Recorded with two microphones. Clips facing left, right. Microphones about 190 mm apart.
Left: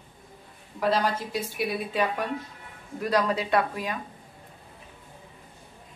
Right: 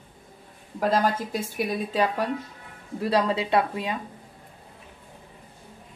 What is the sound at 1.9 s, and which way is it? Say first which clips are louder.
Speech: right 3 dB; 35° right (ahead or behind).